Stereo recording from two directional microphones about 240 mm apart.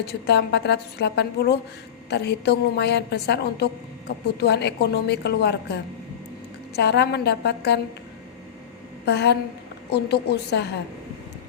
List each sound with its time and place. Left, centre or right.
0.0 s a woman's voice: left
9.0 s a woman's voice: left